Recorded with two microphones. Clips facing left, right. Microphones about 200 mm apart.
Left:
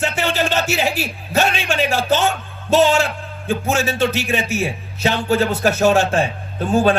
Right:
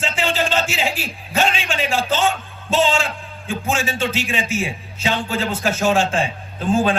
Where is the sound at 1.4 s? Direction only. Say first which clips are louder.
Left 2 dB; 65° left (ahead or behind).